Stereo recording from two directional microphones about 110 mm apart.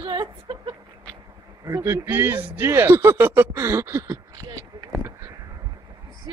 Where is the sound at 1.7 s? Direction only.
20° right (ahead or behind).